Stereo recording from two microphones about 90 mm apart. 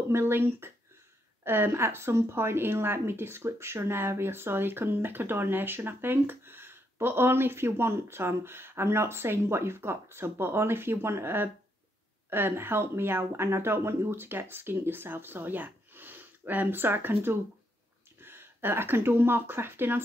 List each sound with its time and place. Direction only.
0.1 s speech: 25° right (ahead or behind)